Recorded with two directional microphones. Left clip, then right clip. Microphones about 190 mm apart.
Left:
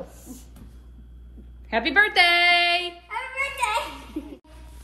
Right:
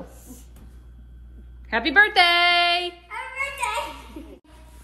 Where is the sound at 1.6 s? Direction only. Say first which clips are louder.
Right 2 dB; 5° right (ahead or behind).